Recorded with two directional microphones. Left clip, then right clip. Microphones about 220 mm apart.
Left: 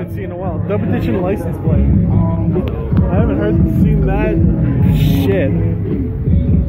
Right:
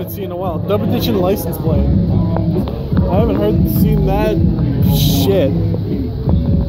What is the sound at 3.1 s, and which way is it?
Speech, 25° right (ahead or behind).